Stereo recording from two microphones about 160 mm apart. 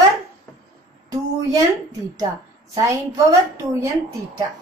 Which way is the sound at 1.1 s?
20° right (ahead or behind).